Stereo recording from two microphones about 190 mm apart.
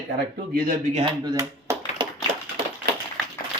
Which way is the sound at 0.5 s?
50° right (ahead or behind).